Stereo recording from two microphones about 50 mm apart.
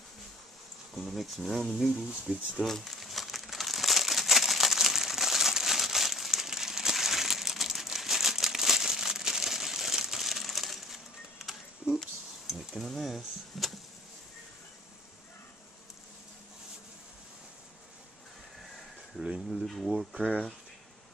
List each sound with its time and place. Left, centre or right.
0.9 s speech: centre
2.3 s speech: centre
2.6 s crumpling: centre
12.4 s a sound: centre
18.6 s a sound: centre
19.5 s speech: centre
20.0 s speech: centre